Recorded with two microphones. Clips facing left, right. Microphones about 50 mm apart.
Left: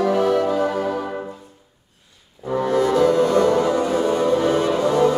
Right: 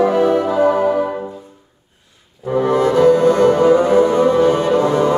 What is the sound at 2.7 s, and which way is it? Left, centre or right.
Music, right.